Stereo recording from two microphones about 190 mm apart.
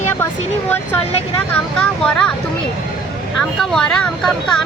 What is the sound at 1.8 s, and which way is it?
Speech, 5° left (ahead or behind).